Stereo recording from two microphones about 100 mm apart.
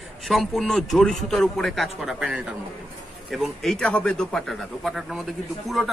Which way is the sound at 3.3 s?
Centre (ahead or behind).